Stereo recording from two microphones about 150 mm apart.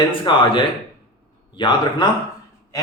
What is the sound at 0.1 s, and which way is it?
A man's voice, 35° left (ahead or behind).